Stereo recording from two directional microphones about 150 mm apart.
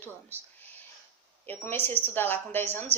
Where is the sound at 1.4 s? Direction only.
15° left (ahead or behind).